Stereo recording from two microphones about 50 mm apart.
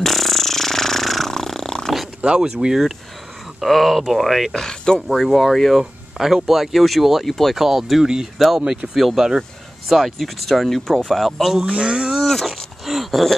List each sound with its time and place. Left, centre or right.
0.0 s a sound: centre
2.2 s speech: centre
3.6 s speech: centre
4.6 s speech: centre
5.0 s speech: centre
11.6 s speech: right
12.2 s a sound: centre